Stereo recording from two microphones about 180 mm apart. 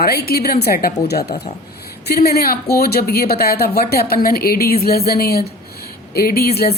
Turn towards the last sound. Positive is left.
turn(degrees=60)  # may be behind; listen again after turning